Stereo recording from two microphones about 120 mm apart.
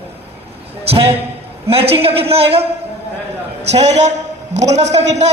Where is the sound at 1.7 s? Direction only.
55° right (ahead or behind).